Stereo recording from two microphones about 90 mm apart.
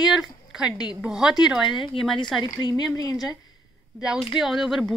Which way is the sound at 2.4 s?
50° left (ahead or behind).